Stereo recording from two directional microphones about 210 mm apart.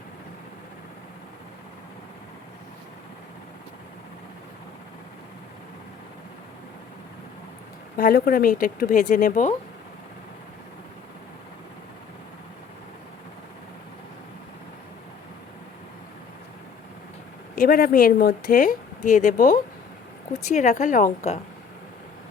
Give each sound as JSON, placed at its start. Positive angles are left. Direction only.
{"t": 7.9, "sound": "speech", "side_deg": 45}
{"t": 17.5, "sound": "speech", "side_deg": 45}